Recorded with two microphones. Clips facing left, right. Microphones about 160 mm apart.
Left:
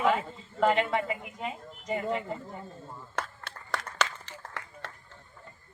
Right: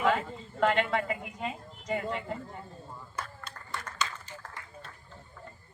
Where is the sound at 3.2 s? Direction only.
70° left (ahead or behind).